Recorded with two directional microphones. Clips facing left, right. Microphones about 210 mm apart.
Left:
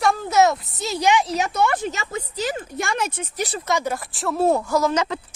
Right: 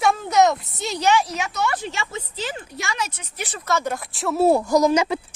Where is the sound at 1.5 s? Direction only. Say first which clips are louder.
Left 2 dB; 55° left (ahead or behind).